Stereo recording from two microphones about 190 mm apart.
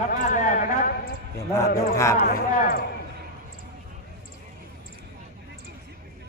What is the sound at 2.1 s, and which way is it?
Speech, 50° left (ahead or behind).